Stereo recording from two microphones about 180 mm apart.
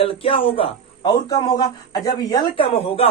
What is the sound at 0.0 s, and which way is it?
A man's voice, 30° left (ahead or behind).